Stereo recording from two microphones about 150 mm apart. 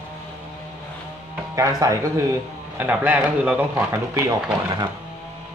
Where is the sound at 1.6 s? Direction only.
20° right (ahead or behind).